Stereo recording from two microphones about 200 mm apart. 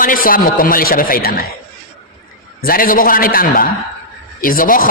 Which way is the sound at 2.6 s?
45° left (ahead or behind).